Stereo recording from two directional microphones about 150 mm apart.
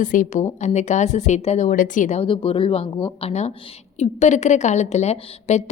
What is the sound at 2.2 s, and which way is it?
A woman's voice, 35° left (ahead or behind).